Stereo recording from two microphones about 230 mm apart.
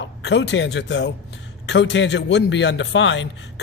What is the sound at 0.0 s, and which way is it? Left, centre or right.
A man's voice, left.